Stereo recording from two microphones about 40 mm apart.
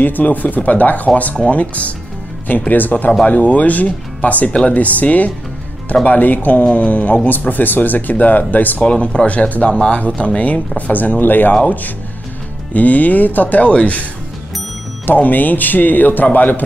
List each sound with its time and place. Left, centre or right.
0.0 s speech: left
2.7 s speech: left
8.8 s speech: left
10.9 s speech: left
13.7 s speech: left
15.0 s speech: left